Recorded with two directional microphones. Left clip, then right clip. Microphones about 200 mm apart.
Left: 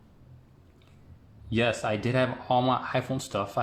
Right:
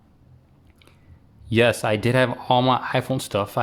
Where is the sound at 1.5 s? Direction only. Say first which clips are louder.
Right 8 dB; 45° right (ahead or behind).